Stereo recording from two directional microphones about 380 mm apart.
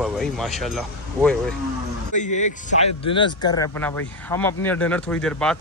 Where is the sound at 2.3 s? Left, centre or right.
Left.